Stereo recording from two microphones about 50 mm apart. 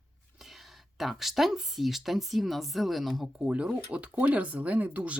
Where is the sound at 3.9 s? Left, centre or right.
Right.